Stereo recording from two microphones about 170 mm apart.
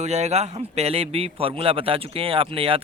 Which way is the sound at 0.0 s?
40° right (ahead or behind).